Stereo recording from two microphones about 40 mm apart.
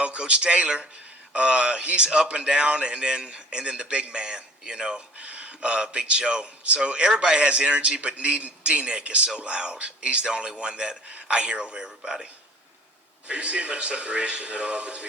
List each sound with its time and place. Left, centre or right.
0.0 s a man's voice: right
5.1 s a man's voice: right
13.2 s speech: right